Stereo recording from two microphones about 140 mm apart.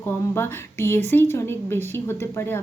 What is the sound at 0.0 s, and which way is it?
A woman's voice, 15° left (ahead or behind).